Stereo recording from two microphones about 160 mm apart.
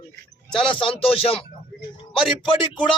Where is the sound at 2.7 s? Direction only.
30° left (ahead or behind).